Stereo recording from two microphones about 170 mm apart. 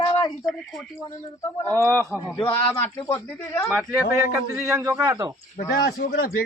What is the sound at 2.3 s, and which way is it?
Speech, 25° left (ahead or behind).